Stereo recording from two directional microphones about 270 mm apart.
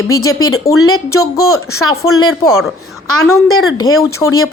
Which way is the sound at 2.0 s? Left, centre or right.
Left.